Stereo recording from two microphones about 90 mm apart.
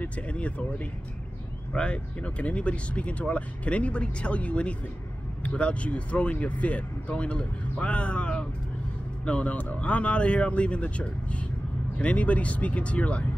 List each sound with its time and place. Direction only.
0.0 s speech: 15° left (ahead or behind)